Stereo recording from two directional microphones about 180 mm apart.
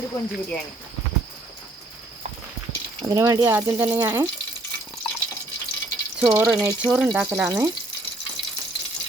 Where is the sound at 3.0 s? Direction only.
20° right (ahead or behind).